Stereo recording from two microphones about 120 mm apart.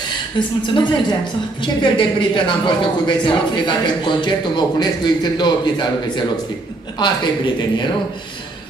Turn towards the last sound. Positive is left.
turn(degrees=40)  # may be behind; listen again after turning